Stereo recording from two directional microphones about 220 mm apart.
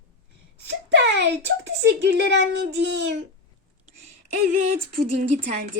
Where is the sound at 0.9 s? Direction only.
55° right (ahead or behind).